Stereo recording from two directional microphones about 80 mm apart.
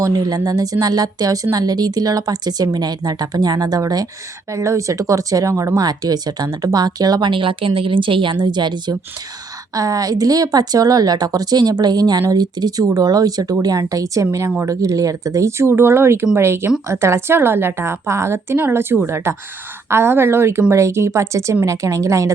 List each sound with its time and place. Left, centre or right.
0.0 s speech: right
4.5 s speech: right
7.3 s speech: right
9.7 s a woman's voice: right